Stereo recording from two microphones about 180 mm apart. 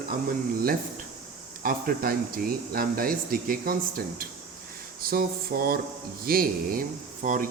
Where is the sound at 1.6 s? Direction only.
55° right (ahead or behind).